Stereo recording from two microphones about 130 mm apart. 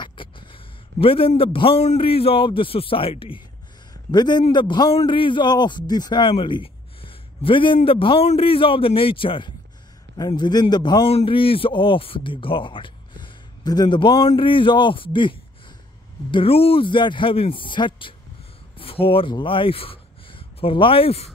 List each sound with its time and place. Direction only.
0.0 s a man's voice: 40° left (ahead or behind)
10.1 s speech: 30° left (ahead or behind); by 21.3 s 50° left (ahead or behind)